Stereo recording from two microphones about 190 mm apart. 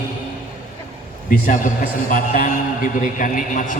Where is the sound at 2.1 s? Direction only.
45° left (ahead or behind).